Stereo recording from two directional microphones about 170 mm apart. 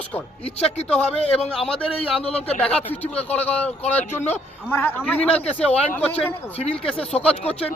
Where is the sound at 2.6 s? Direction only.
10° left (ahead or behind).